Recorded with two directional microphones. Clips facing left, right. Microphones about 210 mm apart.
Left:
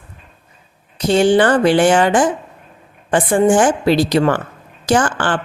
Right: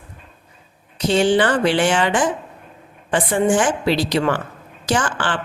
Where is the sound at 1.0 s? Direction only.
45° left (ahead or behind).